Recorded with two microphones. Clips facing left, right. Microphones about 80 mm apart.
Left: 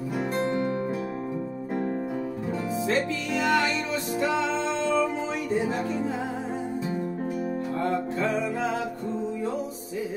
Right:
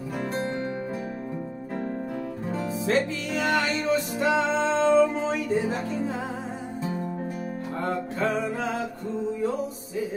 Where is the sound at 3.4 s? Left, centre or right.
Right.